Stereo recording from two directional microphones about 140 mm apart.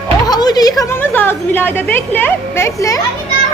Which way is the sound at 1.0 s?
15° left (ahead or behind).